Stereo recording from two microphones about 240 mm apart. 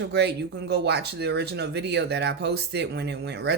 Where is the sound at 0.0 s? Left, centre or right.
Right.